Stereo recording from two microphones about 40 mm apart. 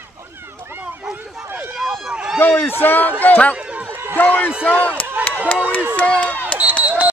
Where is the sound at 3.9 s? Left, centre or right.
Right.